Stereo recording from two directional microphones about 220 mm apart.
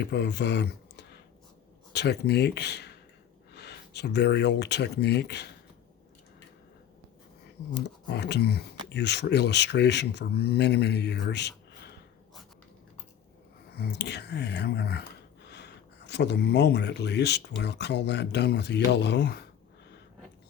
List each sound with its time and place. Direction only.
0.0 s speech: 50° left (ahead or behind)
7.7 s speech: 50° left (ahead or behind)
13.7 s speech: 50° left (ahead or behind)